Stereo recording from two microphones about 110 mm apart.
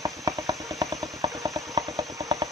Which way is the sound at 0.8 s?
30° right (ahead or behind).